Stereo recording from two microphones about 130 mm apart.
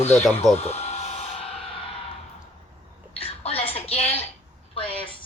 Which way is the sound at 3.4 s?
50° left (ahead or behind).